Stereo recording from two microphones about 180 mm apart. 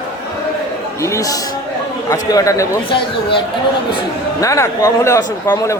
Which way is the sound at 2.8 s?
30° left (ahead or behind).